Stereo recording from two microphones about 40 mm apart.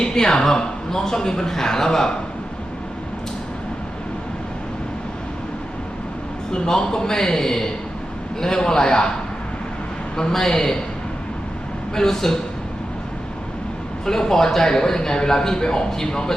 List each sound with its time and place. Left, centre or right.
0.0 s a man's voice: centre
6.5 s a man's voice: centre
10.2 s a man's voice: centre
11.9 s a man's voice: centre
14.0 s a man's voice: centre